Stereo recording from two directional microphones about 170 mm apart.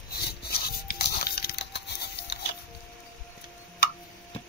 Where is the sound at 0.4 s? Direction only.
75° left (ahead or behind).